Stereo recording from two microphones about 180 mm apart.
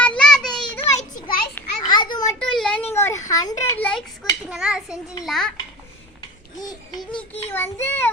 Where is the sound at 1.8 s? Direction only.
25° left (ahead or behind).